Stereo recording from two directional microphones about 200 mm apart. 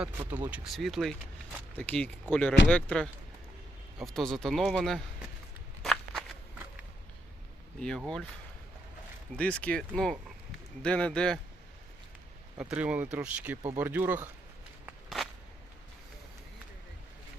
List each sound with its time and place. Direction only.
0.0 s speech: 10° right (ahead or behind)
5.8 s walk: centre (ahead or behind)
7.8 s speech: centre (ahead or behind)
9.3 s speech: 5° left (ahead or behind)
12.5 s speech: 5° right (ahead or behind)
14.8 s walk: centre (ahead or behind)